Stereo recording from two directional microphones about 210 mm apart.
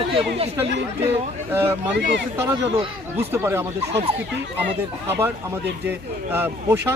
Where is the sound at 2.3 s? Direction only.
10° right (ahead or behind).